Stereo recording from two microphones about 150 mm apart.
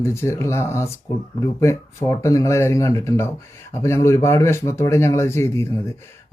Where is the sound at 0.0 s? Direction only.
15° left (ahead or behind).